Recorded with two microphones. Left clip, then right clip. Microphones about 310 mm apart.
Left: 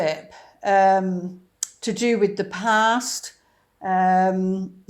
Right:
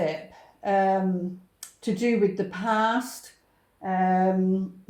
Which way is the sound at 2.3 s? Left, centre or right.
Left.